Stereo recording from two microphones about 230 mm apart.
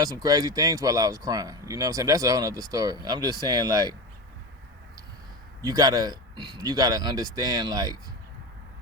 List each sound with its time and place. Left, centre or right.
0.0 s speech: centre
5.6 s speech: centre